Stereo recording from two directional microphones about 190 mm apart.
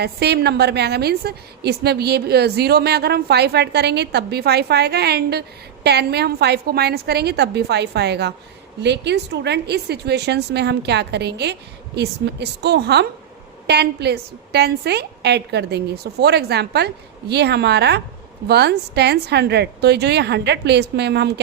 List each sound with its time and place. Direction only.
0.0 s a woman's voice: 60° right (ahead or behind)